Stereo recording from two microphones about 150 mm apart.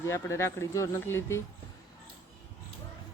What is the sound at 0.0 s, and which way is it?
Speech, 20° left (ahead or behind).